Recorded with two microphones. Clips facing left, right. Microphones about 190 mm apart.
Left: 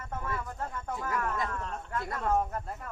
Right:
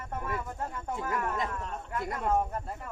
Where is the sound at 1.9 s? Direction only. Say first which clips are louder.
Right 1 dB; 15° right (ahead or behind).